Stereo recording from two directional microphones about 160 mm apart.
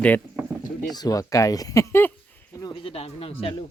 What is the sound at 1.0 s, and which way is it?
Speech, 20° left (ahead or behind).